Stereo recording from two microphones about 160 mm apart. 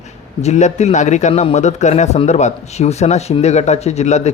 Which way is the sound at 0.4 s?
45° left (ahead or behind).